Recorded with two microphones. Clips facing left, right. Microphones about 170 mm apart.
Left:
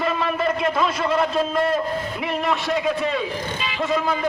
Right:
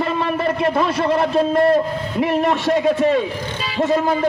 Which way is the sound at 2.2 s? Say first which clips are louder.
Right 8 dB; 45° right (ahead or behind).